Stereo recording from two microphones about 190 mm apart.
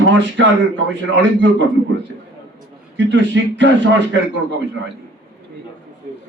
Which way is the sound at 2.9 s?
70° right (ahead or behind).